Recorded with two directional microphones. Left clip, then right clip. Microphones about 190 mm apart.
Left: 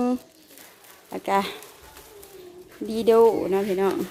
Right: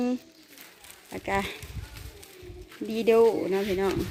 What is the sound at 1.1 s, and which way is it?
Speech, 5° left (ahead or behind).